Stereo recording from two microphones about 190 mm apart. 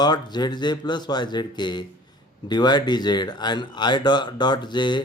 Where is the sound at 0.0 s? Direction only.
20° left (ahead or behind).